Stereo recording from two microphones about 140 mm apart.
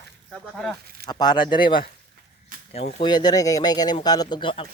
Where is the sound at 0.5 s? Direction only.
5° left (ahead or behind).